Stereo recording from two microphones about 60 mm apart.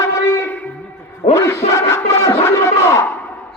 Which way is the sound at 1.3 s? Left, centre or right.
Left.